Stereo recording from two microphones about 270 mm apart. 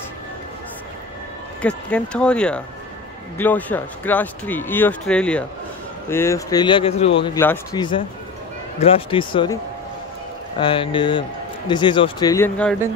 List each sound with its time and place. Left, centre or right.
1.6 s speech: centre
10.6 s speech: centre